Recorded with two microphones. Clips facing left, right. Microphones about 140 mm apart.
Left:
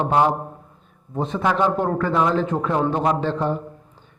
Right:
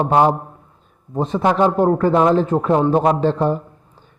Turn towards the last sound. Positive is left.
turn(degrees=-40)  # may be behind; listen again after turning